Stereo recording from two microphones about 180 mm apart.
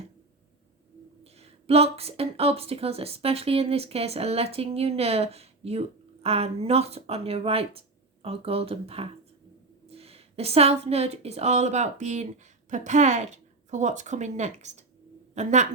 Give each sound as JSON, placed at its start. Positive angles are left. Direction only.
{"t": 1.2, "sound": "a woman's voice", "side_deg": -35}